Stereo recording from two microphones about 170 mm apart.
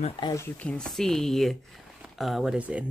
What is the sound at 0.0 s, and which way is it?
Speech, 25° left (ahead or behind).